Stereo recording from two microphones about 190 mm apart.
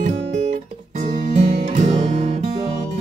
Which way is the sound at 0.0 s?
40° right (ahead or behind).